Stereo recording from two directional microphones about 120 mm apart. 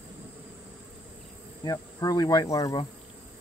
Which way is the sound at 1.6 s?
30° left (ahead or behind).